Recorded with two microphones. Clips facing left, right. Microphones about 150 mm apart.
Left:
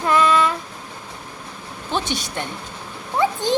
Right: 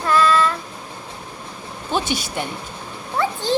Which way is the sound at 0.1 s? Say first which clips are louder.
Even; 20° left (ahead or behind).